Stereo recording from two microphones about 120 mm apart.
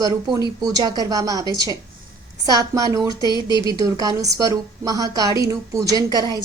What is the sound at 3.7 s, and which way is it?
A woman's voice, 30° right (ahead or behind).